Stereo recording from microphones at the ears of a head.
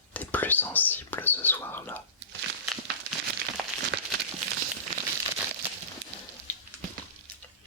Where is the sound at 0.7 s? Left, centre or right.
Left.